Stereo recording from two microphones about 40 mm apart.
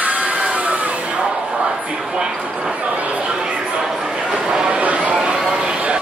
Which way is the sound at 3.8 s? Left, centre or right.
Centre.